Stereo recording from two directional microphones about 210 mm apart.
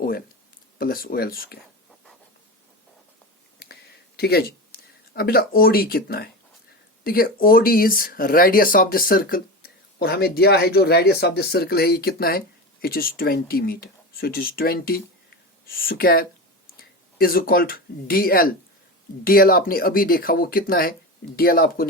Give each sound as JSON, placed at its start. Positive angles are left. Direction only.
{"t": 0.8, "sound": "speech", "side_deg": 45}
{"t": 4.2, "sound": "speech", "side_deg": 50}